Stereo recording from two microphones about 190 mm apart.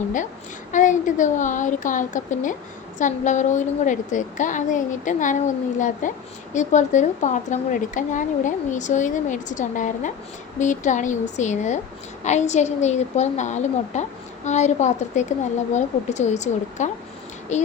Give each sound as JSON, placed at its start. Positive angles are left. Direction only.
{"t": 0.7, "sound": "a woman's voice", "side_deg": 40}